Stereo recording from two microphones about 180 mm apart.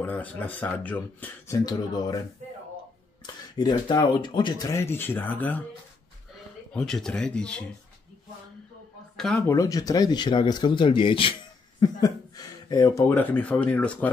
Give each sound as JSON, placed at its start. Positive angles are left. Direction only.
{"t": 0.0, "sound": "speech", "side_deg": 10}
{"t": 3.5, "sound": "speech", "side_deg": 25}
{"t": 6.7, "sound": "speech", "side_deg": 5}
{"t": 9.1, "sound": "speech", "side_deg": 0}
{"t": 9.5, "sound": "speech", "side_deg": 20}